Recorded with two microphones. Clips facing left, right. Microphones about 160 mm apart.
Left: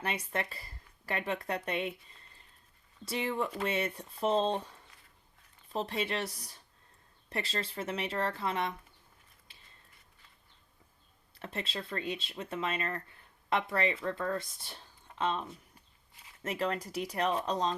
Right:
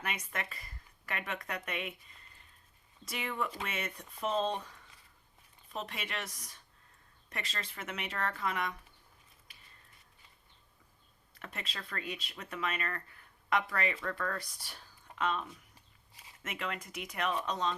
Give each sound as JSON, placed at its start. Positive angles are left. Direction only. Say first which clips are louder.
{"t": 0.0, "sound": "speech", "louder": "left 4 dB", "side_deg": 30}
{"t": 9.5, "sound": "a sound", "louder": "left 1 dB", "side_deg": 25}
{"t": 11.3, "sound": "speech", "louder": "left 6 dB", "side_deg": 30}